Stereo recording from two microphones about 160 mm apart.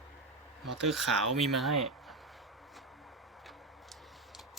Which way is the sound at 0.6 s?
Centre (ahead or behind).